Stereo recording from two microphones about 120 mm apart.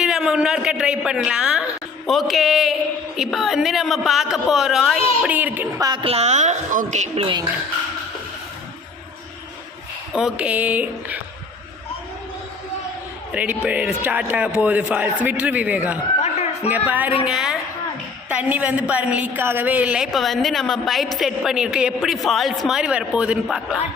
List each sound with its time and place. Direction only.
0.0 s a woman's voice: 5° right (ahead or behind)
5.3 s speech: 15° right (ahead or behind)
5.8 s speech: 35° right (ahead or behind)
6.1 s a woman's voice: 65° right (ahead or behind); by 7.1 s 85° right
7.2 s speech: 40° right (ahead or behind)
10.2 s speech: 5° right (ahead or behind)
13.3 s a woman's voice: 10° right (ahead or behind)
20.1 s a woman's voice: centre (ahead or behind)